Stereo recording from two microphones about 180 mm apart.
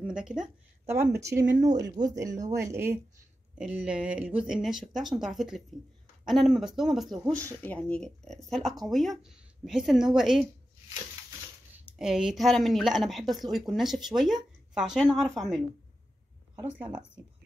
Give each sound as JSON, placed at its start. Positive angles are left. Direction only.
{"t": 0.0, "sound": "speech", "side_deg": -5}
{"t": 0.8, "sound": "speech", "side_deg": -15}
{"t": 3.5, "sound": "speech", "side_deg": -5}
{"t": 11.7, "sound": "speech", "side_deg": -5}
{"t": 16.5, "sound": "speech", "side_deg": -10}